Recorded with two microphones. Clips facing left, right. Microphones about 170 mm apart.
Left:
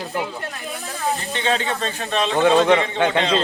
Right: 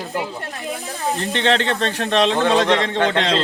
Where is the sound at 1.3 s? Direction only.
70° right (ahead or behind).